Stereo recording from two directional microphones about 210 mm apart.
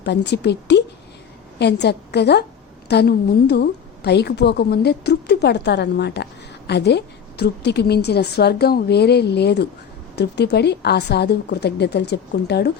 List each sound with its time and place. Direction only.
0.0 s a woman's voice: 55° left (ahead or behind)